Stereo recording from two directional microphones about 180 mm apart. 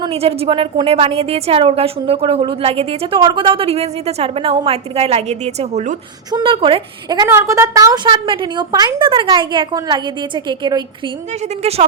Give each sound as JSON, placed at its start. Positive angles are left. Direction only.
{"t": 0.0, "sound": "a woman's voice", "side_deg": -35}
{"t": 6.3, "sound": "a woman's voice", "side_deg": -30}